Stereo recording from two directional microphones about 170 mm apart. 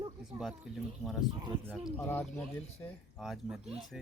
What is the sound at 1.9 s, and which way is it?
Speech, 15° left (ahead or behind).